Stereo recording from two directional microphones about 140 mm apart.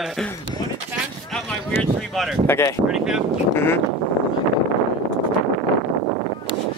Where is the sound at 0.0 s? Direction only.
Centre (ahead or behind).